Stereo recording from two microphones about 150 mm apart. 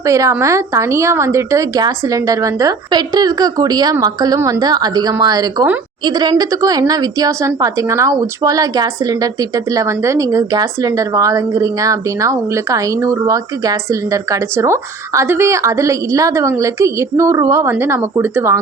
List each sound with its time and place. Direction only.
0.0 s a woman's voice: 20° right (ahead or behind)